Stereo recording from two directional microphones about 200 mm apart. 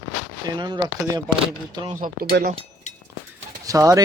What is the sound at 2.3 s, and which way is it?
Speech, 45° right (ahead or behind).